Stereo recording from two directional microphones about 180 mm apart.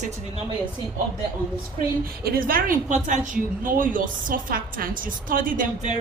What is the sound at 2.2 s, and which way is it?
A woman's voice, 55° right (ahead or behind).